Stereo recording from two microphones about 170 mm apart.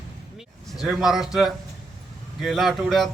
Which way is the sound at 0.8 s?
Centre (ahead or behind).